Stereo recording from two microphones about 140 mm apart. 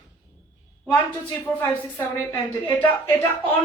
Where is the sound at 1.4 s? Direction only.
10° left (ahead or behind).